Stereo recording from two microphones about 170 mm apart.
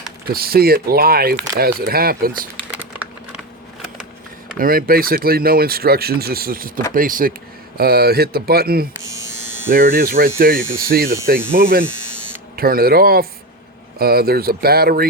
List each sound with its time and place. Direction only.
0.3 s speech: 65° right (ahead or behind)
4.5 s speech: 55° right (ahead or behind)
7.8 s speech: 65° right (ahead or behind)